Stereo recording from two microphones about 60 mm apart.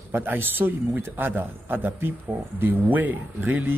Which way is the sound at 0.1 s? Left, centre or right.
Right.